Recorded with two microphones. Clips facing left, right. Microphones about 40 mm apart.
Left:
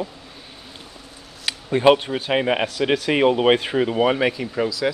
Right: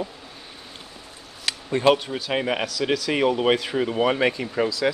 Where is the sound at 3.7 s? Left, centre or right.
Centre.